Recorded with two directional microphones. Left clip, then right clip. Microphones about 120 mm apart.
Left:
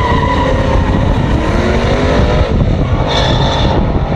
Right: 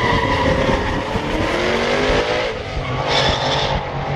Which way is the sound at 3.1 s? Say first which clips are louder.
Left 3 dB; 30° right (ahead or behind).